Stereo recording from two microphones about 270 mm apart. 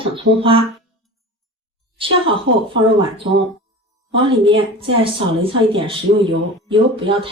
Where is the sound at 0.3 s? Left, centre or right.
Centre.